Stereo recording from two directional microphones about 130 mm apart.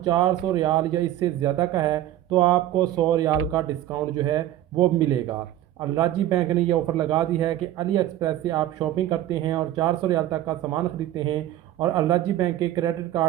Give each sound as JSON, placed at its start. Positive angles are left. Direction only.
{"t": 0.0, "sound": "a man's voice", "side_deg": -30}
{"t": 11.8, "sound": "a man's voice", "side_deg": -30}